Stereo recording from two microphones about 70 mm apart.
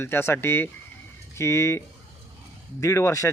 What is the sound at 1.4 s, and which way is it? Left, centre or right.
A man's voice, left.